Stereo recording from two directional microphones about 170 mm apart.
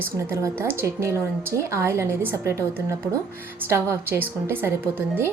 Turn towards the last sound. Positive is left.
turn(degrees=-15)  # may be behind; listen again after turning